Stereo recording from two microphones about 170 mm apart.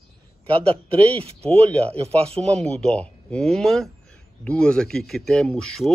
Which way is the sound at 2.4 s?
5° left (ahead or behind).